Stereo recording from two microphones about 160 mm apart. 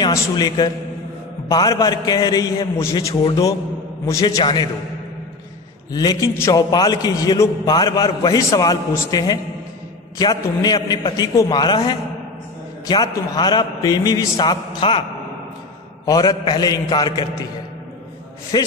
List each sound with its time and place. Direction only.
0.0 s a man's voice: 25° left (ahead or behind)
5.9 s a man's voice: 25° left (ahead or behind)
16.1 s a man's voice: 25° left (ahead or behind)
18.5 s a man's voice: 25° left (ahead or behind)